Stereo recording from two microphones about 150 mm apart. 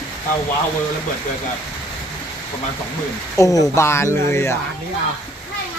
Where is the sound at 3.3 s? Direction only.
20° left (ahead or behind).